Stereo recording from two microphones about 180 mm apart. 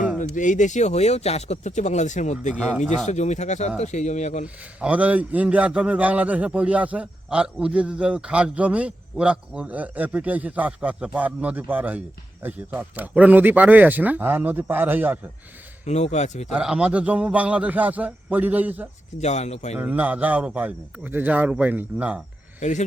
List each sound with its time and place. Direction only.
0.3 s speech: 45° left (ahead or behind)
2.5 s speech: centre (ahead or behind)
3.1 s speech: 40° left (ahead or behind)
4.4 s a man's voice: 10° right (ahead or behind)
15.9 s speech: 40° left (ahead or behind)
16.5 s a man's voice: 5° right (ahead or behind)
19.2 s speech: 40° left (ahead or behind)
19.8 s a man's voice: 10° right (ahead or behind)
22.6 s speech: 40° left (ahead or behind)